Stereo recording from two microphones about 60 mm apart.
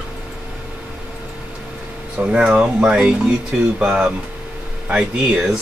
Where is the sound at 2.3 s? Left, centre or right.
Centre.